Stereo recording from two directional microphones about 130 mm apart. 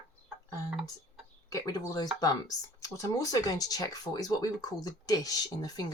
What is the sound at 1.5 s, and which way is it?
Speech, 30° left (ahead or behind).